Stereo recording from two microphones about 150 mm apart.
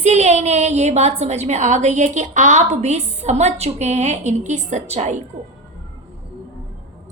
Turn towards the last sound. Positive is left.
turn(degrees=-50)  # may be behind; listen again after turning